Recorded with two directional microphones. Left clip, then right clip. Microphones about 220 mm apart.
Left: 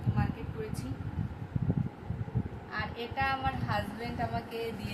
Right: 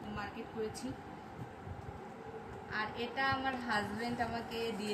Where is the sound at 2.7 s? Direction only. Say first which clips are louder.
Left 2 dB; 20° left (ahead or behind).